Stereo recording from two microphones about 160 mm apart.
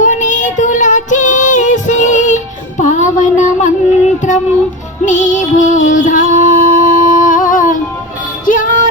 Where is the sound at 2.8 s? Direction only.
50° left (ahead or behind).